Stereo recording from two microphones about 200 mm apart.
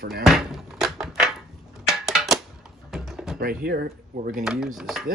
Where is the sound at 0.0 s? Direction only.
50° right (ahead or behind).